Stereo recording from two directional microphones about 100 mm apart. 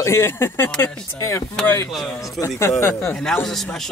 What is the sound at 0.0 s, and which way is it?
Speech, 25° left (ahead or behind).